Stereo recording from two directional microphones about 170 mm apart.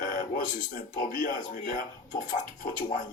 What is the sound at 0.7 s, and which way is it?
A man's voice, 50° left (ahead or behind).